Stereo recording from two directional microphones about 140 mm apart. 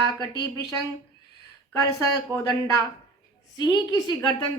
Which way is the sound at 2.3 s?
25° left (ahead or behind).